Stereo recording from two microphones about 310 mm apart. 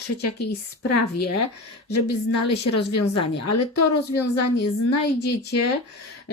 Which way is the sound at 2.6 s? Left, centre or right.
Left.